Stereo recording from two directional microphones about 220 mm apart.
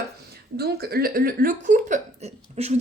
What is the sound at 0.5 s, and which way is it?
Speech, 45° right (ahead or behind).